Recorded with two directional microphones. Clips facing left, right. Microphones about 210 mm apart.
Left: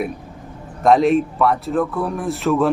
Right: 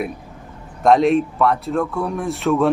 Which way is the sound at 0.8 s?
Centre (ahead or behind).